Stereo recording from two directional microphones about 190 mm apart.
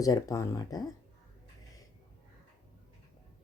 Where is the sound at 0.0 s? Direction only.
20° left (ahead or behind).